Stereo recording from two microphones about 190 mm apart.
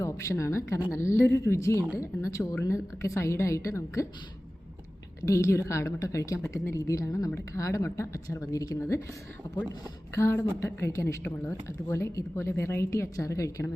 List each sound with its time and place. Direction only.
0.0 s a woman's voice: 15° left (ahead or behind)
5.2 s a woman's voice: 15° left (ahead or behind)
10.2 s a woman's voice: 15° left (ahead or behind)